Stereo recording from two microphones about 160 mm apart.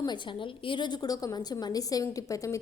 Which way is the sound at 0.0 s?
30° left (ahead or behind).